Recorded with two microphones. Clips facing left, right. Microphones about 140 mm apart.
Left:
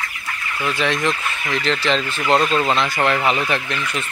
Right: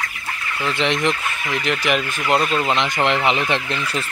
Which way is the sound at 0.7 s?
20° right (ahead or behind).